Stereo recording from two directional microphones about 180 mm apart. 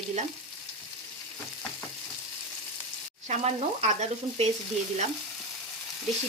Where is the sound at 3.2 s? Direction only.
40° right (ahead or behind).